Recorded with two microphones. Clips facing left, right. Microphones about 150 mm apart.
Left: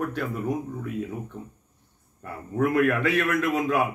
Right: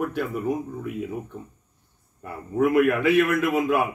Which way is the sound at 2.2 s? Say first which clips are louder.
Right 3 dB; 5° right (ahead or behind).